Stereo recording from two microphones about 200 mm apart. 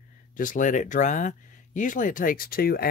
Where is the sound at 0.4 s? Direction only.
40° left (ahead or behind).